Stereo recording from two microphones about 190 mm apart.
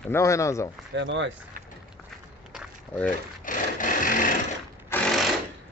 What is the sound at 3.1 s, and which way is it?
Sewing machine, 45° left (ahead or behind).